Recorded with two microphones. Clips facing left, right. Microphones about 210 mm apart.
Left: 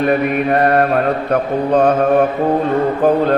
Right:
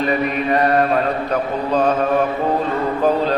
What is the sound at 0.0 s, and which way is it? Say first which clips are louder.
Speech: left 4 dB; 55° left (ahead or behind).